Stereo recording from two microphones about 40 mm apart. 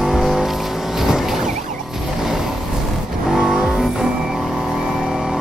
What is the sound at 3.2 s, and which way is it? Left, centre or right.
Vehicle, centre.